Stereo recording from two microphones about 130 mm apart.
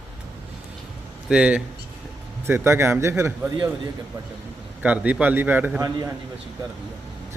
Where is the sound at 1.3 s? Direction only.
10° right (ahead or behind).